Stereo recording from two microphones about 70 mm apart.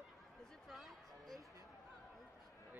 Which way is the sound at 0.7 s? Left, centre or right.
Centre.